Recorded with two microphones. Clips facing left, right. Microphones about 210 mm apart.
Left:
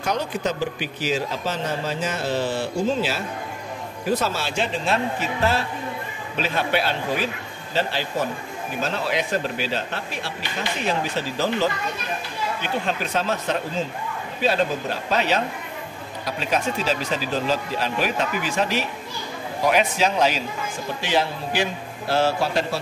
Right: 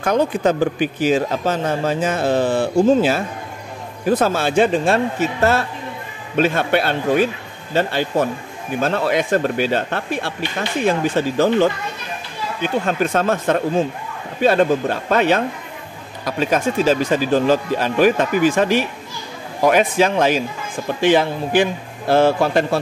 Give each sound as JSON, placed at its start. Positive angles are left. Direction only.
{"t": 0.0, "sound": "speech", "side_deg": -55}